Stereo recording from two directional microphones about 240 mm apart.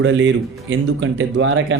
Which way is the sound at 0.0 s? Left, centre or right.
Right.